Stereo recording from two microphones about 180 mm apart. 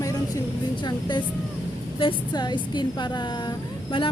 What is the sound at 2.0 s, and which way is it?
Speech, 25° left (ahead or behind).